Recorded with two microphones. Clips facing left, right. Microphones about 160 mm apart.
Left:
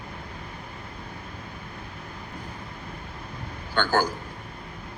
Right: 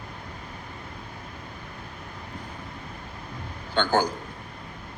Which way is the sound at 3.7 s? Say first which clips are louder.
Right 1 dB; 20° right (ahead or behind).